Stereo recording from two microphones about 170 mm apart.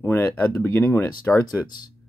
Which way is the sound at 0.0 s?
15° left (ahead or behind).